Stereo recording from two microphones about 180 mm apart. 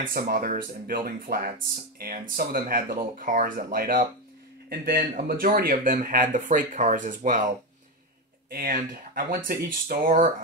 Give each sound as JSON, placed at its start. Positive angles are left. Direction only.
{"t": 0.1, "sound": "speech", "side_deg": -55}
{"t": 8.5, "sound": "speech", "side_deg": -50}